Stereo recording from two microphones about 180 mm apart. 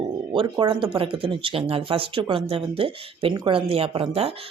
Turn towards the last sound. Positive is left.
turn(degrees=-30)  # may be behind; listen again after turning